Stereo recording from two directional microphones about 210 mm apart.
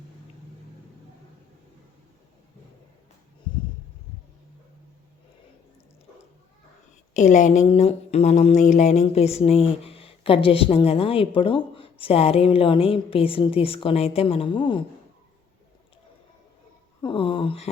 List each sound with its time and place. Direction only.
3.5 s a sound: 20° left (ahead or behind)
7.1 s speech: 35° left (ahead or behind)
17.0 s speech: 25° left (ahead or behind)